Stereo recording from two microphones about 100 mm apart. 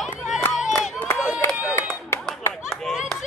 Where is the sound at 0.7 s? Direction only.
5° left (ahead or behind).